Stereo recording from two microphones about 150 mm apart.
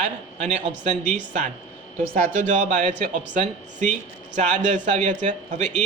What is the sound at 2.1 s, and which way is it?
Speech, 65° right (ahead or behind).